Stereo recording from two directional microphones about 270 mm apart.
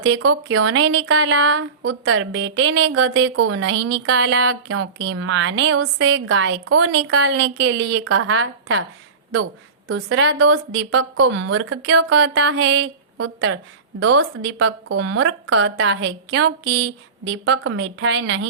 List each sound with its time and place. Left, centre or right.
0.2 s speech: right
9.9 s speech: right
11.9 s speech: right
12.1 s speech: right
14.0 s speech: right
14.9 s speech: right